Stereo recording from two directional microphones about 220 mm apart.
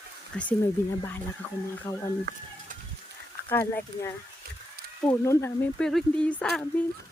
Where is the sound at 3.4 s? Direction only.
10° left (ahead or behind).